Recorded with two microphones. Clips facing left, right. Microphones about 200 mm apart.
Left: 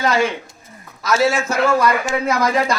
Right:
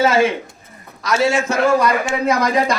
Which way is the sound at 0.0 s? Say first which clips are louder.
Right 3 dB; 5° right (ahead or behind).